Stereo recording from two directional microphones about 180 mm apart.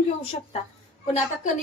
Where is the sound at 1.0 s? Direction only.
40° left (ahead or behind).